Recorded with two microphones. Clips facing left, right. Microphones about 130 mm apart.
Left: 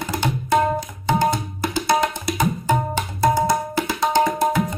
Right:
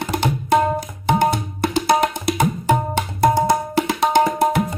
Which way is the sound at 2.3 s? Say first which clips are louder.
Right 4 dB; 65° right (ahead or behind).